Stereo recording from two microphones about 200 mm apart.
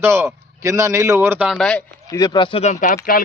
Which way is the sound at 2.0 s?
15° left (ahead or behind).